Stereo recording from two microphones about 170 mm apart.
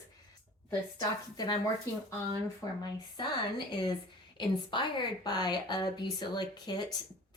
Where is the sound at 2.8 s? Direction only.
25° left (ahead or behind).